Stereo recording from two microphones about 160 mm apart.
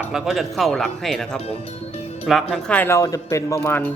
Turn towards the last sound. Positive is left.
turn(degrees=15)  # may be behind; listen again after turning